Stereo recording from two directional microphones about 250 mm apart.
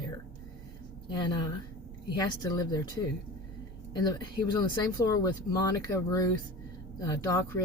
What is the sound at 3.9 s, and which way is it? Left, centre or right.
Speech, centre.